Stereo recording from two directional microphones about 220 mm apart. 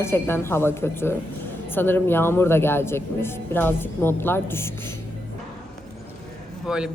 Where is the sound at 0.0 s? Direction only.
10° left (ahead or behind).